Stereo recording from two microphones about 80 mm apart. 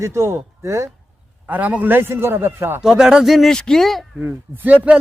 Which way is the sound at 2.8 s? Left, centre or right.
Centre.